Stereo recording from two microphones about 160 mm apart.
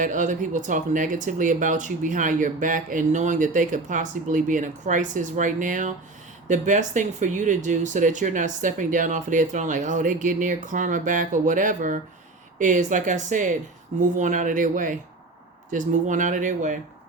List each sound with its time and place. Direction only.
0.0 s speech: 50° right (ahead or behind)